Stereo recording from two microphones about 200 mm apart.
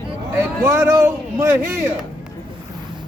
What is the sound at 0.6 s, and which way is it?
A man's voice, 15° right (ahead or behind).